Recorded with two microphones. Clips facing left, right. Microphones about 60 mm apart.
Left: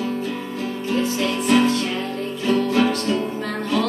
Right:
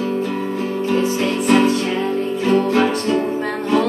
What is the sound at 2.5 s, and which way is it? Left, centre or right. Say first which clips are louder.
Music: right 3 dB; right.